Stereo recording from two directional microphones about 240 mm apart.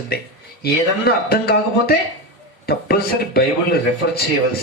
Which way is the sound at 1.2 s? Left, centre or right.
Left.